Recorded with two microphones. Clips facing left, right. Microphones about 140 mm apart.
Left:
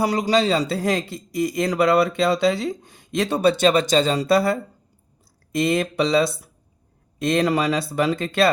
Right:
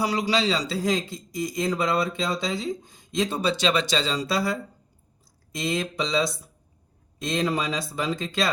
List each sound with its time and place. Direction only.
0.0 s a man's voice: 45° left (ahead or behind)